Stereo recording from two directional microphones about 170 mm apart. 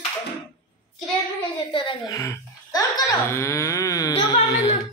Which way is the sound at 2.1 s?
15° left (ahead or behind).